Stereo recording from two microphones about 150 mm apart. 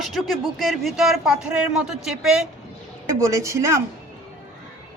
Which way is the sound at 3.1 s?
20° right (ahead or behind).